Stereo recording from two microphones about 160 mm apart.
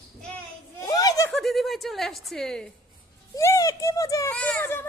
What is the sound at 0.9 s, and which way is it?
Giggle, 25° left (ahead or behind).